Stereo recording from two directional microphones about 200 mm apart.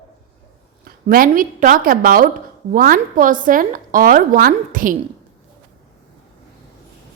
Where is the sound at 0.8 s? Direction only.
45° right (ahead or behind).